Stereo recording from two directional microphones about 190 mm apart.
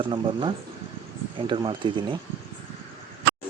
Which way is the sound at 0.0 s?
25° right (ahead or behind).